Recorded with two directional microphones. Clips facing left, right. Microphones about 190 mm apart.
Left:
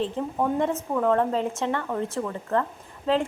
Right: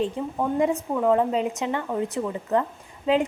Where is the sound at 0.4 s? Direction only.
10° right (ahead or behind).